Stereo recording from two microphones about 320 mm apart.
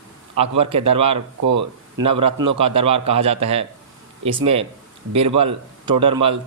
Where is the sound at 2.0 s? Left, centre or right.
Centre.